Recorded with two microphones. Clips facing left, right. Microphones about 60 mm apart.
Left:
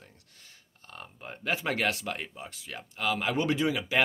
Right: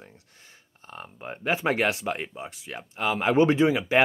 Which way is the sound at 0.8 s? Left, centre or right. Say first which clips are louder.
Right 5 dB; right.